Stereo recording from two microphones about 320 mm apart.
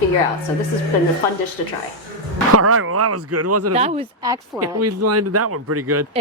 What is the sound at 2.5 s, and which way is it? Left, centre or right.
Speech, right.